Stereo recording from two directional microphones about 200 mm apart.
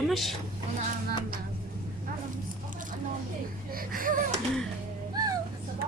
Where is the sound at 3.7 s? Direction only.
45° right (ahead or behind).